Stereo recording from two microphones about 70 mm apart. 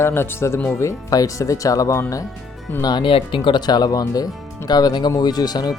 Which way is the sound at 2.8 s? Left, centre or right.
Left.